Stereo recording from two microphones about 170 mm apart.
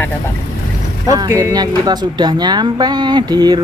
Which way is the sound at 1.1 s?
20° right (ahead or behind).